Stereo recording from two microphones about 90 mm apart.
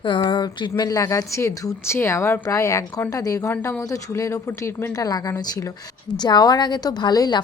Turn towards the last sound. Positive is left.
turn(degrees=50)  # may be behind; listen again after turning